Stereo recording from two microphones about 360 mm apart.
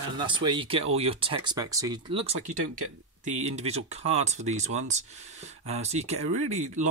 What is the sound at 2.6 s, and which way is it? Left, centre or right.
Speech, right.